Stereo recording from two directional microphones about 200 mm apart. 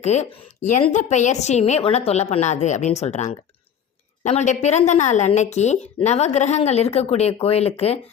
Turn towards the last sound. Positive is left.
turn(degrees=30)  # may be behind; listen again after turning